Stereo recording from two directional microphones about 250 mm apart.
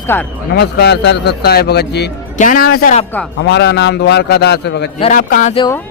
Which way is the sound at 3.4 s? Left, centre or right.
Left.